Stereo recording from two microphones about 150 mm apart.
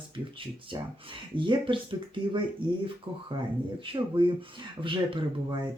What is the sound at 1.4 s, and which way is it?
Speech, 35° right (ahead or behind).